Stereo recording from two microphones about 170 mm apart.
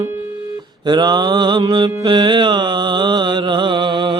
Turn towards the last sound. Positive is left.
turn(degrees=-30)  # may be behind; listen again after turning